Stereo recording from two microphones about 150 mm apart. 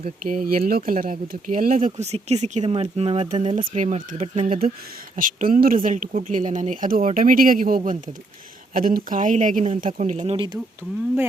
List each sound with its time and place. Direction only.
0.0 s speech: 70° right (ahead or behind)
2.0 s speech: 45° right (ahead or behind); by 8.1 s 65° right (ahead or behind)
8.7 s speech: 75° right (ahead or behind); by 10.3 s 55° right (ahead or behind)
10.3 s speech: 30° right (ahead or behind)